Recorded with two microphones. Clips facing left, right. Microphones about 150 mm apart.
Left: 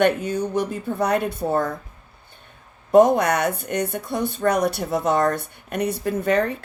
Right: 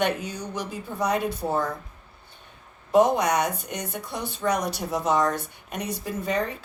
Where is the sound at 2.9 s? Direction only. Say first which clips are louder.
Left 5 dB; 50° left (ahead or behind).